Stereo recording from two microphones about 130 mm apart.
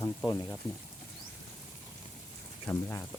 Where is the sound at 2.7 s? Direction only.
15° left (ahead or behind).